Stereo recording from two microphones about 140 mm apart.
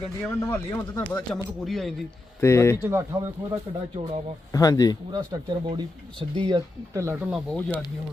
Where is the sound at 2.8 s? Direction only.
15° right (ahead or behind).